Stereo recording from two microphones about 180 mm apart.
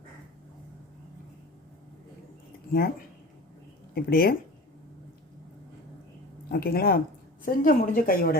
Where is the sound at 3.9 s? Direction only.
55° left (ahead or behind).